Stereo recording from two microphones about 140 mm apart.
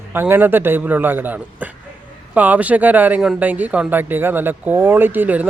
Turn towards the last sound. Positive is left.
turn(degrees=-10)  # may be behind; listen again after turning